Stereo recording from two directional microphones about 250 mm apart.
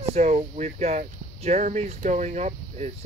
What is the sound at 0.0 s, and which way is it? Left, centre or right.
Speech, right.